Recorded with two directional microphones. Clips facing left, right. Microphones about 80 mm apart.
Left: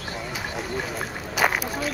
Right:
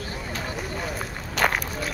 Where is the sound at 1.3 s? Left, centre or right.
Centre.